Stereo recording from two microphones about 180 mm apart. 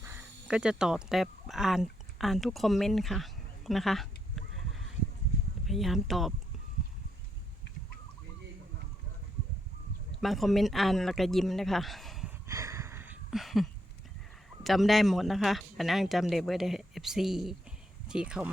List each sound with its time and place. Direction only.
0.0 s speech: 10° right (ahead or behind)
10.2 s speech: centre (ahead or behind)
12.5 s a sound: 15° right (ahead or behind)
13.3 s speech: centre (ahead or behind)